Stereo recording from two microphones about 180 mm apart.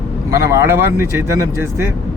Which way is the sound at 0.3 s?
15° right (ahead or behind).